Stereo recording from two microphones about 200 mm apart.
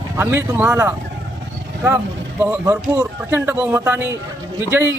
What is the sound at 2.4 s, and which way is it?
Speech, 10° right (ahead or behind).